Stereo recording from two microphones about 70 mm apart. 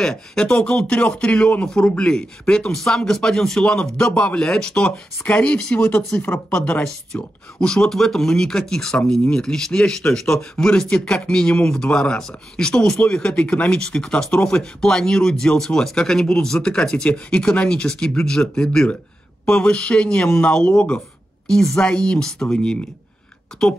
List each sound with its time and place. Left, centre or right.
0.0 s speech: centre; by 6.6 s left
6.6 s a woman's voice: centre